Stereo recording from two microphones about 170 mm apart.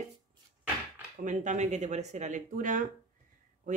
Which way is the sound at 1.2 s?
45° right (ahead or behind).